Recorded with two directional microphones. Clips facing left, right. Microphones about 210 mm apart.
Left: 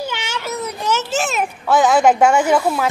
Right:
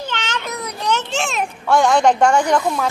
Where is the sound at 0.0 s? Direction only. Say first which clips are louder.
Left 1 dB; 10° left (ahead or behind).